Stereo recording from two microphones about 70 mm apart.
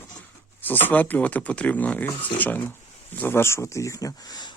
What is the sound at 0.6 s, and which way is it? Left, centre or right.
Speech, left.